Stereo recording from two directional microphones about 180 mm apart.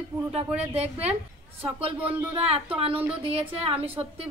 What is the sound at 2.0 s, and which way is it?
Speech, 10° right (ahead or behind).